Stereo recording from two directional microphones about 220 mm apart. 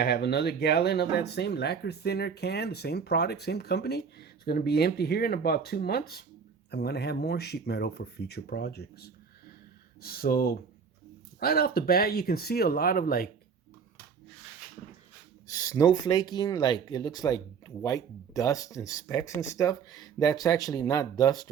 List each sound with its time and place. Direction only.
0.0 s speech: 50° left (ahead or behind)
15.4 s speech: 15° left (ahead or behind)